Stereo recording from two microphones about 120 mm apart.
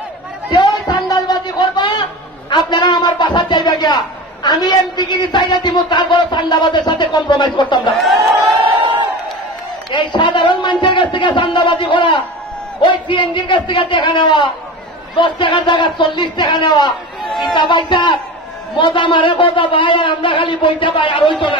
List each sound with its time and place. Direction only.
0.5 s a sound: 35° left (ahead or behind)
2.5 s a man's voice: 40° left (ahead or behind)
8.0 s a sound: centre (ahead or behind)
9.8 s a man's voice: 40° left (ahead or behind)
17.2 s chatter: centre (ahead or behind)
17.6 s a man's voice: 40° left (ahead or behind)